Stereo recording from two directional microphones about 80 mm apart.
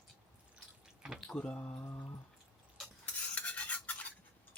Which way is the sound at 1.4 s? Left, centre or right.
Centre.